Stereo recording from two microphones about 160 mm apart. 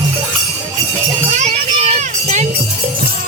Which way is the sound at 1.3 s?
45° right (ahead or behind).